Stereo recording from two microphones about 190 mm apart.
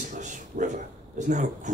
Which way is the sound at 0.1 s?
40° right (ahead or behind).